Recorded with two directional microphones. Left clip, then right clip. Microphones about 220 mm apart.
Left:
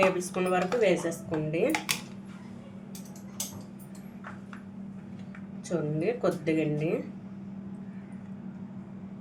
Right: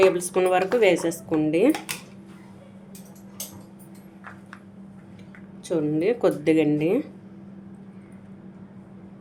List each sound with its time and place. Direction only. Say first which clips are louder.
0.0 s speech: right 7 dB; 50° right (ahead or behind)
5.6 s speech: right 7 dB; 45° right (ahead or behind)